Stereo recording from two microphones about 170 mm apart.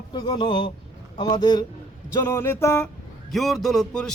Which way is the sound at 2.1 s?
15° left (ahead or behind).